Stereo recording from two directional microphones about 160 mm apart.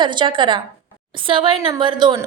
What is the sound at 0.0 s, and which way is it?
A woman's voice, 30° right (ahead or behind).